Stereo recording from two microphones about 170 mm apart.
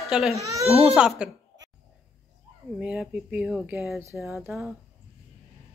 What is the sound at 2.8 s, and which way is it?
Speech, 5° right (ahead or behind).